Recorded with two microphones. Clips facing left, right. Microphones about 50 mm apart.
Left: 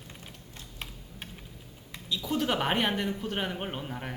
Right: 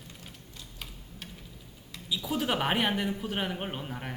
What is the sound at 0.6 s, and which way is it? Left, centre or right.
Typing, left.